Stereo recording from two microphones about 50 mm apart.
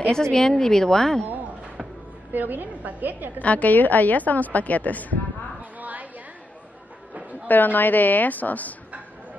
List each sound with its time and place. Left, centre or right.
0.1 s a woman's voice: centre
2.3 s a woman's voice: right
3.3 s a woman's voice: left
5.6 s a sound: right
7.4 s a woman's voice: left